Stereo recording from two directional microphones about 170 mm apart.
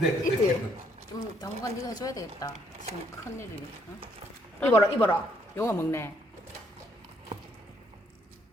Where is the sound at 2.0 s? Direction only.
20° left (ahead or behind).